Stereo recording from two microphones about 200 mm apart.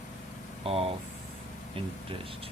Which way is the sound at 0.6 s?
30° right (ahead or behind).